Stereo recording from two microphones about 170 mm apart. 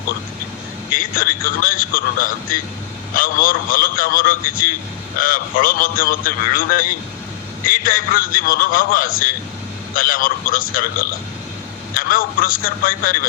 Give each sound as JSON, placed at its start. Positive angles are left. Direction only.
{"t": 0.9, "sound": "a man's voice", "side_deg": 55}